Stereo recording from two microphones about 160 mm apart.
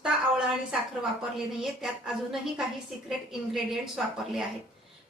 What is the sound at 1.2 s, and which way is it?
A woman's voice, centre (ahead or behind).